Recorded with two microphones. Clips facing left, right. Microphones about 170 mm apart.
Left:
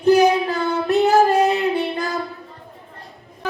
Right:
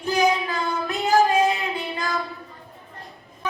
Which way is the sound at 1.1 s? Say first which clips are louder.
Left 1 dB; 65° left (ahead or behind).